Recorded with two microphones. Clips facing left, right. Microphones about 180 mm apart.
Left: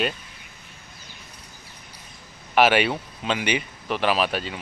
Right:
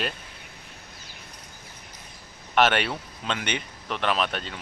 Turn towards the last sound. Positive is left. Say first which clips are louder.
# left 3 dB
turn(degrees=5)  # may be behind; listen again after turning